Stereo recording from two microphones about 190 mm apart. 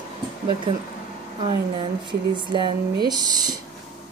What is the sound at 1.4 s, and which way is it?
A woman's voice, 25° right (ahead or behind).